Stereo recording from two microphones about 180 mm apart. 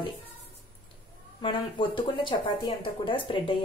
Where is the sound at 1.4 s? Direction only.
25° left (ahead or behind).